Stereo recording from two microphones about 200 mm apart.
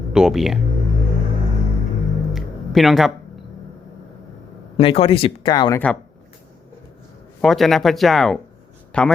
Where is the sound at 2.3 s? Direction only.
Centre (ahead or behind).